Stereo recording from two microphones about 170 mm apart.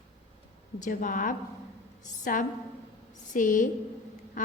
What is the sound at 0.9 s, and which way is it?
A woman's voice, 50° left (ahead or behind).